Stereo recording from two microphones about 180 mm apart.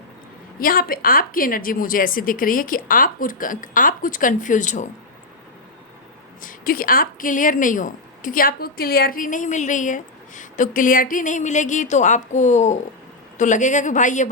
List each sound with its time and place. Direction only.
0.6 s a woman's voice: 55° left (ahead or behind)
6.4 s a woman's voice: 50° left (ahead or behind)